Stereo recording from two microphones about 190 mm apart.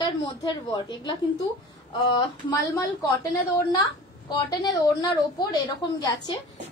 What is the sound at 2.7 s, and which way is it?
Speech, 20° left (ahead or behind).